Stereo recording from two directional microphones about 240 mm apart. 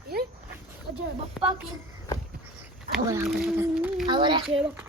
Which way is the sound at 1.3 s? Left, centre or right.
Centre.